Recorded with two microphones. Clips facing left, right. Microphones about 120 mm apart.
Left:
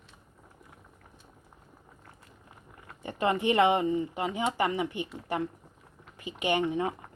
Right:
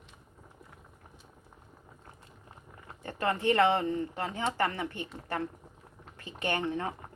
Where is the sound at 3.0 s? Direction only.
15° left (ahead or behind).